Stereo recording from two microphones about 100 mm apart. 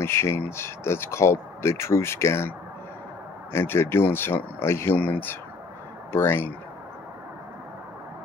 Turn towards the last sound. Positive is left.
turn(degrees=25)  # may be behind; listen again after turning